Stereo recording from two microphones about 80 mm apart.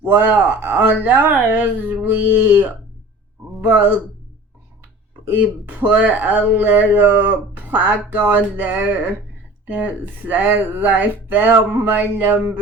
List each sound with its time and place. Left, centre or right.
0.0 s speech: right
5.2 s speech: right
10.2 s speech: right